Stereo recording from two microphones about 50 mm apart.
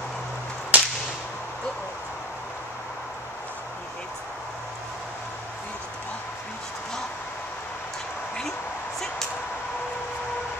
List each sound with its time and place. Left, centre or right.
0.7 s whip: right